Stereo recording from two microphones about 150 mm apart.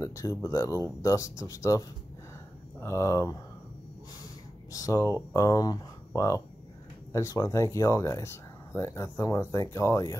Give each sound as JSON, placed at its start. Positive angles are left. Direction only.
{"t": 0.0, "sound": "speech", "side_deg": 20}
{"t": 4.7, "sound": "speech", "side_deg": 20}